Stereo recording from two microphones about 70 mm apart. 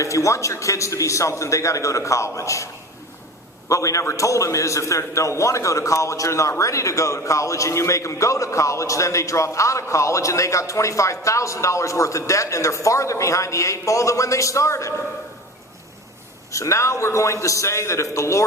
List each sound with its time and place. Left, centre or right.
0.0 s a man's voice: left
3.7 s a man's voice: left
16.5 s a man's voice: left